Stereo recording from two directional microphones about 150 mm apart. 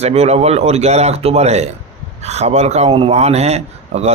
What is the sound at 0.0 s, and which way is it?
A man's voice, 45° right (ahead or behind).